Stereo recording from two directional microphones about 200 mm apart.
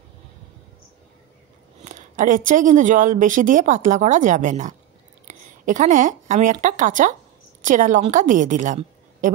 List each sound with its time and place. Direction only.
1.8 s a woman's voice: 40° right (ahead or behind)